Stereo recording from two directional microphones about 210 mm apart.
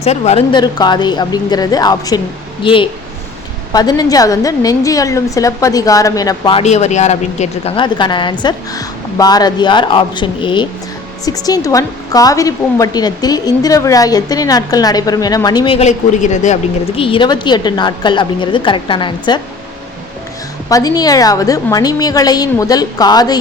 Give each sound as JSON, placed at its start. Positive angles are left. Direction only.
{"t": 0.0, "sound": "a woman's voice", "side_deg": 30}
{"t": 17.0, "sound": "a woman's voice", "side_deg": 25}
{"t": 20.7, "sound": "a woman's voice", "side_deg": 15}